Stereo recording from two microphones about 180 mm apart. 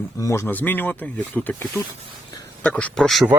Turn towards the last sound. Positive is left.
turn(degrees=0)  # may be behind; listen again after turning